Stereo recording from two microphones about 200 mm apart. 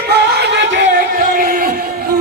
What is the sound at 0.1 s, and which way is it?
Music, 60° right (ahead or behind).